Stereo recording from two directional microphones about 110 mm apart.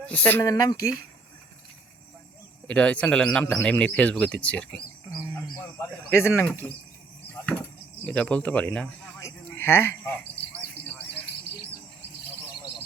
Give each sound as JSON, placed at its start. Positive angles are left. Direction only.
{"t": 0.0, "sound": "speech", "side_deg": 10}
{"t": 0.4, "sound": "speech", "side_deg": 30}
{"t": 2.6, "sound": "speech", "side_deg": 10}
{"t": 5.2, "sound": "bird", "side_deg": 20}
{"t": 7.4, "sound": "a sound", "side_deg": 15}